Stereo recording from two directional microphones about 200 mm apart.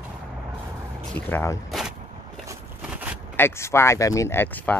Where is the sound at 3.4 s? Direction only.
15° left (ahead or behind).